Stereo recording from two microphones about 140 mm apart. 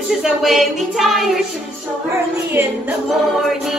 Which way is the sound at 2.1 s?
15° right (ahead or behind).